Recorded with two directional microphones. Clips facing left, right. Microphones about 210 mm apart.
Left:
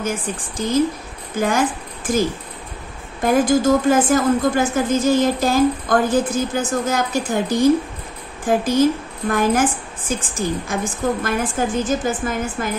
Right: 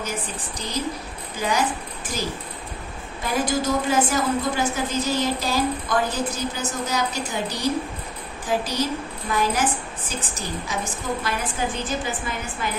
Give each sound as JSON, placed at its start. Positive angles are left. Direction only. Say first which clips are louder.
{"t": 0.6, "sound": "a woman's voice", "louder": "left 10 dB", "side_deg": 50}
{"t": 3.3, "sound": "a woman's voice", "louder": "left 8 dB", "side_deg": 50}